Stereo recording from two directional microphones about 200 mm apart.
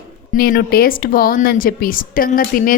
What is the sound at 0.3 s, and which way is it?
A woman's voice, 50° left (ahead or behind).